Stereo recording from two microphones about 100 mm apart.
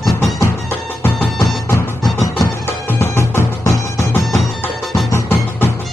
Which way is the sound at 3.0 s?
30° left (ahead or behind).